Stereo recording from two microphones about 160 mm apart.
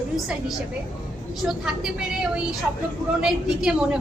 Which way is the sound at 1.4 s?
Centre (ahead or behind).